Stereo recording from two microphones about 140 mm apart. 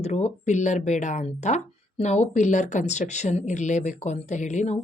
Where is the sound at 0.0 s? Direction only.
55° left (ahead or behind).